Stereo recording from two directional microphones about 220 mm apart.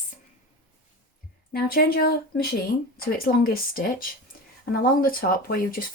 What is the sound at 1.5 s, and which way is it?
Speech, 45° left (ahead or behind).